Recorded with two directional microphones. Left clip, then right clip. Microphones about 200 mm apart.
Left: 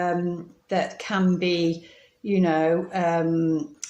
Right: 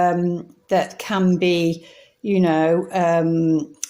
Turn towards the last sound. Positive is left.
turn(degrees=-35)  # may be behind; listen again after turning